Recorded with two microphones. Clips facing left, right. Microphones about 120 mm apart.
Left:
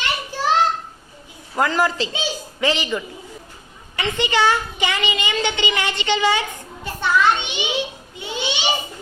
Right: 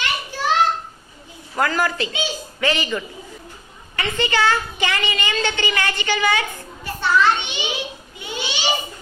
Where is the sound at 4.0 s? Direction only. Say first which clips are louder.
Left 1 dB; 20° left (ahead or behind).